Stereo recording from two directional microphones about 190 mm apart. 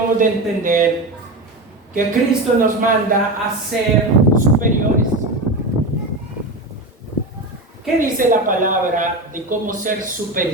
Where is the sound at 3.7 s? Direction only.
Centre (ahead or behind).